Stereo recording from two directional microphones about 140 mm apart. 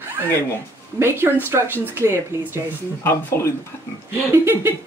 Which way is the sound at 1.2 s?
15° right (ahead or behind).